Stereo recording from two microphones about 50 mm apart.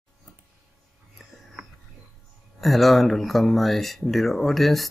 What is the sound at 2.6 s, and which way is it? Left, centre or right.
Speech, centre.